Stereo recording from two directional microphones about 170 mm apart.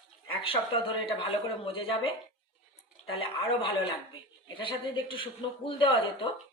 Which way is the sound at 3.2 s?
30° left (ahead or behind).